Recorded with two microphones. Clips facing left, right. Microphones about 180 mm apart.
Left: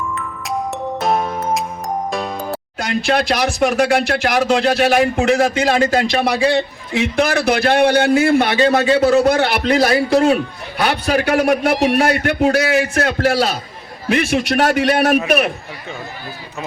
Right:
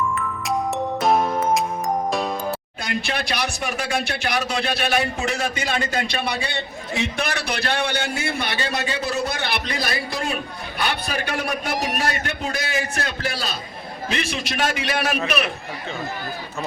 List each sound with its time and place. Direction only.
0.4 s music: centre (ahead or behind)
2.7 s speech: 80° left
7.5 s a man's voice: 55° left (ahead or behind)
9.0 s a man's voice: 90° left; by 15.2 s 60° left (ahead or behind)